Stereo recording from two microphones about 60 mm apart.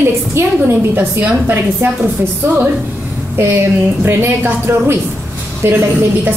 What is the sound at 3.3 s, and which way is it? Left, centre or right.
A woman's voice, right.